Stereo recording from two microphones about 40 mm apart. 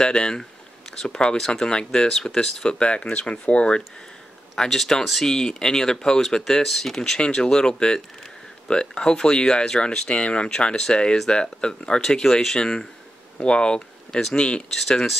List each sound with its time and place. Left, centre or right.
0.0 s speech: left
4.6 s speech: centre; by 14.6 s left
14.9 s speech: centre